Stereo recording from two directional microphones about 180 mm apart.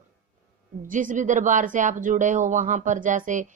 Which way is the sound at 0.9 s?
45° right (ahead or behind).